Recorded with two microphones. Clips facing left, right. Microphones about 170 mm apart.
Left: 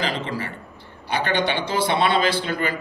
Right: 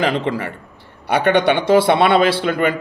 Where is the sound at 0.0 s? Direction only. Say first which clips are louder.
Right 7 dB; 60° right (ahead or behind).